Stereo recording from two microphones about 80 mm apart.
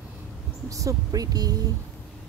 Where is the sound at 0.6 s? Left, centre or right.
Right.